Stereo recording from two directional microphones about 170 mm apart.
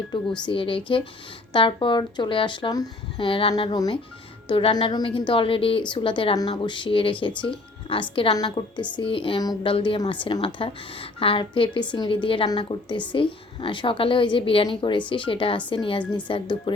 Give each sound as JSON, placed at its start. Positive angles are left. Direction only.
{"t": 0.4, "sound": "a woman's voice", "side_deg": 30}